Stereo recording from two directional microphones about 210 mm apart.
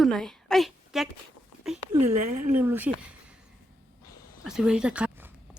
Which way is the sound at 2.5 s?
10° right (ahead or behind).